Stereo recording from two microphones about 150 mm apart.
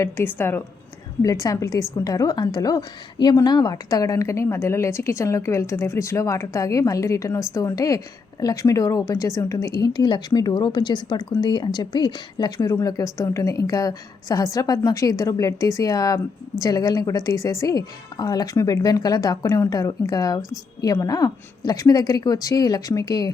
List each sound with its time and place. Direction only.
0.0 s a woman's voice: 15° left (ahead or behind)